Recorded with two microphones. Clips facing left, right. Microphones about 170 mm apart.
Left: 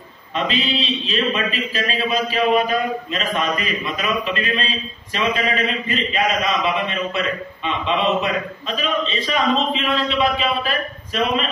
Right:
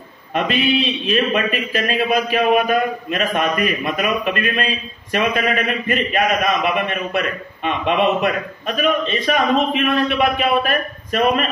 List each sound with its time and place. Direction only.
0.3 s a man's voice: 60° right (ahead or behind)